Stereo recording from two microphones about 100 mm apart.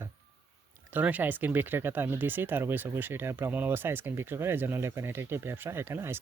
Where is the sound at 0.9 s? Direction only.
15° right (ahead or behind).